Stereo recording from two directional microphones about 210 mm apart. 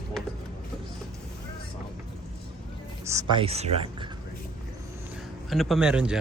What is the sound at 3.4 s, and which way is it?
Speech, 30° right (ahead or behind).